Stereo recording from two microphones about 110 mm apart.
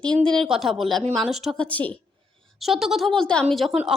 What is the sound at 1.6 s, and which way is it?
Speech, 10° left (ahead or behind).